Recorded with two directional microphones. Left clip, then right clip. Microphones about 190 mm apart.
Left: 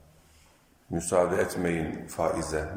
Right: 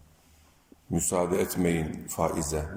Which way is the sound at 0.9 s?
20° right (ahead or behind).